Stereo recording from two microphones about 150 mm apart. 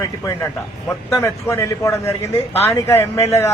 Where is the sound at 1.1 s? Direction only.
20° left (ahead or behind).